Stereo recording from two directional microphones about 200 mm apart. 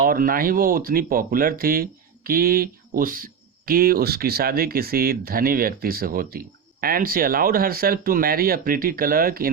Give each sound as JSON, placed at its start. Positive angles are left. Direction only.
{"t": 0.0, "sound": "speech", "side_deg": -45}